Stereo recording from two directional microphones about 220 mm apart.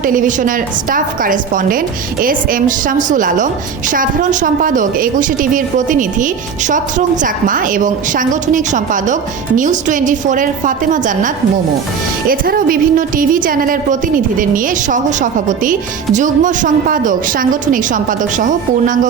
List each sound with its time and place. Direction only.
0.0 s a woman's voice: 35° right (ahead or behind)
12.3 s a woman's voice: 40° right (ahead or behind)